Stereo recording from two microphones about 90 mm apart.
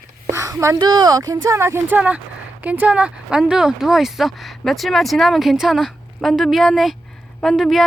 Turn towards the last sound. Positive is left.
turn(degrees=0)  # may be behind; listen again after turning